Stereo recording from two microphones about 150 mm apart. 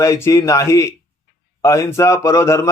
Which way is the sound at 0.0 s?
20° left (ahead or behind).